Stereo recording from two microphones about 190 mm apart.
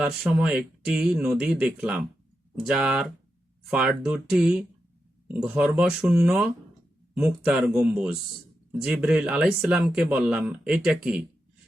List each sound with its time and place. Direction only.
0.0 s speech: 5° right (ahead or behind)